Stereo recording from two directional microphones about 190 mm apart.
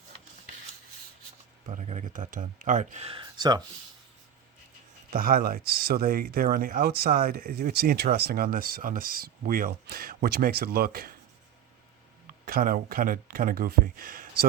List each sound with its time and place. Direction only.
1.6 s speech: 40° right (ahead or behind); by 3.6 s 25° right (ahead or behind)
5.1 s speech: 50° right (ahead or behind)
12.5 s speech: 50° right (ahead or behind)